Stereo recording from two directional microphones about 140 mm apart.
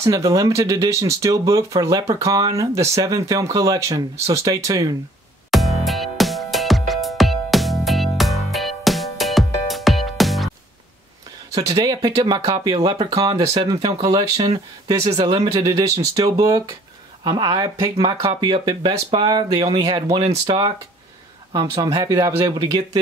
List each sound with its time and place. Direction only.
0.0 s speech: 25° right (ahead or behind)
5.5 s music: centre (ahead or behind)
11.5 s speech: 25° right (ahead or behind)
17.9 s speech: 40° right (ahead or behind)
18.4 s speech: 30° right (ahead or behind)
21.9 s speech: 25° right (ahead or behind)